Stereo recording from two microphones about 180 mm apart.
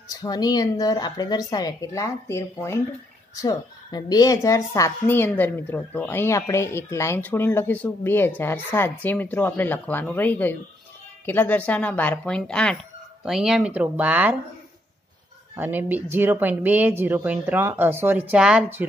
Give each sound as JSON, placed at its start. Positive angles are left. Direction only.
{"t": 0.2, "sound": "a woman's voice", "side_deg": 20}
{"t": 15.5, "sound": "speech", "side_deg": -10}